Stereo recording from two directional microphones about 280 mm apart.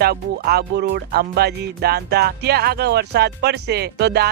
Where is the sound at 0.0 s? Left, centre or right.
Right.